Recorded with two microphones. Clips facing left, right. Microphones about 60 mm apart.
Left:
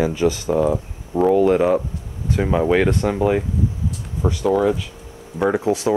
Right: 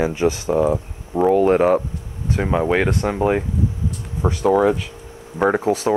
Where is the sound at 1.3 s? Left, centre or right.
Right.